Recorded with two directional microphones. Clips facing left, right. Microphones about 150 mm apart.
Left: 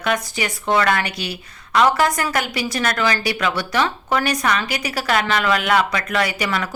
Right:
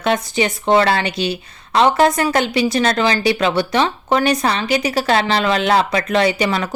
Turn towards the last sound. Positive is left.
turn(degrees=-25)  # may be behind; listen again after turning